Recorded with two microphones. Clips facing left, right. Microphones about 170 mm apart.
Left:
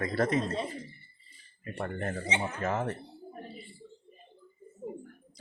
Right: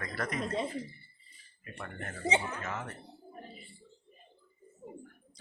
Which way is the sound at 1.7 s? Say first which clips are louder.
Left 9 dB; 35° left (ahead or behind).